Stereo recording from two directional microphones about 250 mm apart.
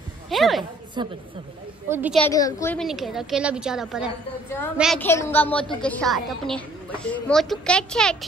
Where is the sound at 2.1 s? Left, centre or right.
Centre.